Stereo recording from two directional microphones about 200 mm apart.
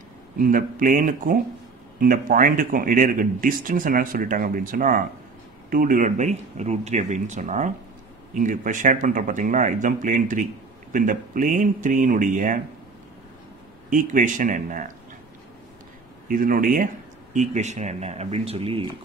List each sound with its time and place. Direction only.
0.4 s speech: 45° right (ahead or behind)
13.8 s speech: 40° right (ahead or behind)
16.3 s speech: 45° right (ahead or behind); by 18.9 s 30° right (ahead or behind)